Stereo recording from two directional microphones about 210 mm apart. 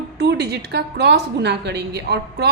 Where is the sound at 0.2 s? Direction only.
50° right (ahead or behind).